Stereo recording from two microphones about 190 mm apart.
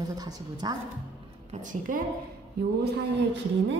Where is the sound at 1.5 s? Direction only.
40° right (ahead or behind).